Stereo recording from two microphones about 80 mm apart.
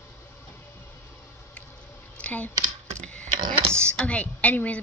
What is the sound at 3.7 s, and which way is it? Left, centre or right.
A woman's voice, centre.